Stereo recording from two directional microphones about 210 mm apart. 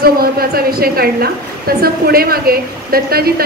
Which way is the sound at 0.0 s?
45° right (ahead or behind).